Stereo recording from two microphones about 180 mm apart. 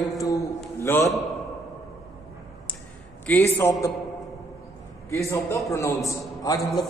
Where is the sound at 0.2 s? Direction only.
20° left (ahead or behind).